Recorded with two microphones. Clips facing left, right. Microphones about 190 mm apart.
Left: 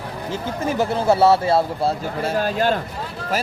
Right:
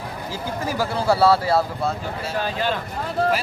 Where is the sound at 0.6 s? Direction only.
25° left (ahead or behind).